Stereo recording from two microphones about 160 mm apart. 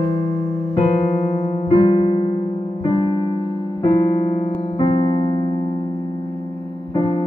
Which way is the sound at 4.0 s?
30° left (ahead or behind).